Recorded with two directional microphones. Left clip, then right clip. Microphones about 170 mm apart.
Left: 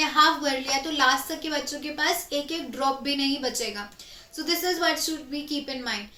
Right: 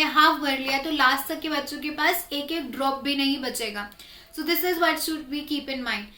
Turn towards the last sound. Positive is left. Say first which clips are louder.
# right 2 dB
turn(degrees=-20)  # may be behind; listen again after turning